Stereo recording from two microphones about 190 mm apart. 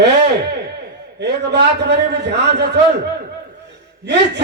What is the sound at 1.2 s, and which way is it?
A man's voice, 65° right (ahead or behind).